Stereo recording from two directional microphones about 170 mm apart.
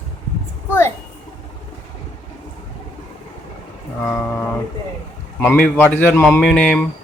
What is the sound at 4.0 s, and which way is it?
Speech, 10° left (ahead or behind).